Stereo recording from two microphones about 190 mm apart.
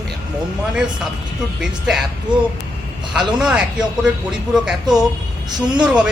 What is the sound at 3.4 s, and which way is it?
Speech, 5° right (ahead or behind).